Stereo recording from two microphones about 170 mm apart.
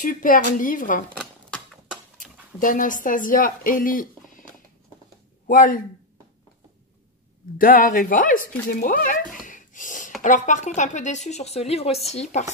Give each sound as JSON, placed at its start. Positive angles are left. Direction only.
{"t": 0.0, "sound": "speech", "side_deg": 50}
{"t": 2.1, "sound": "speech", "side_deg": 50}
{"t": 5.5, "sound": "speech", "side_deg": 55}
{"t": 7.5, "sound": "a sound", "side_deg": 55}
{"t": 10.2, "sound": "speech", "side_deg": 45}